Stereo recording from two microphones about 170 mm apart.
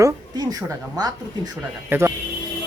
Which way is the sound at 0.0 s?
20° right (ahead or behind).